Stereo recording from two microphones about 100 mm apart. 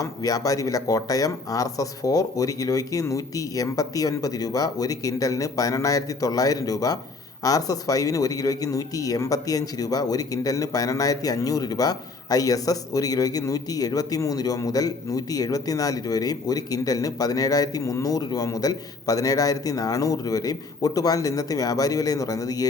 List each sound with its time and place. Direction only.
0.0 s speech: 35° left (ahead or behind)